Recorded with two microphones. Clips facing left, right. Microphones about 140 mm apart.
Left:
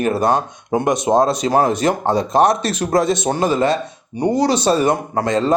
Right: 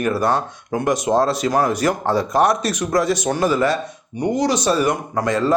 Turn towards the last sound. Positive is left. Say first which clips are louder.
# left 2 dB
turn(degrees=25)  # may be behind; listen again after turning